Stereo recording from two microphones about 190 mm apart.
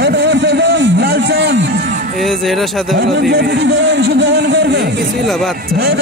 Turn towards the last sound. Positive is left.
turn(degrees=-60)  # may be behind; listen again after turning